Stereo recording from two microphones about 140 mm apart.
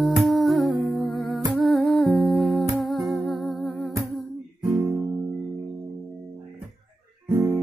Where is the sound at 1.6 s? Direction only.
Centre (ahead or behind).